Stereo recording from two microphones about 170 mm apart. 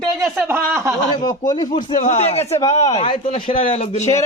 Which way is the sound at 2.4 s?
20° left (ahead or behind).